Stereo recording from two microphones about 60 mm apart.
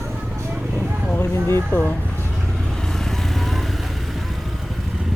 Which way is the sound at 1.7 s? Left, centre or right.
Left.